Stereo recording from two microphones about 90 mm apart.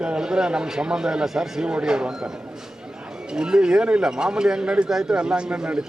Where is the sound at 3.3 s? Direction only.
10° right (ahead or behind).